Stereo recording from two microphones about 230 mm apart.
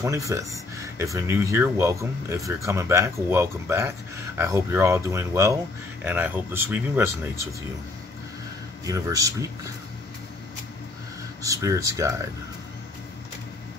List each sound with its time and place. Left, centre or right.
0.0 s speech: centre
8.8 s speech: centre
11.4 s speech: centre